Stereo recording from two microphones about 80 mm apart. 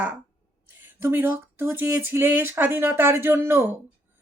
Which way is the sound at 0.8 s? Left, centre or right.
Right.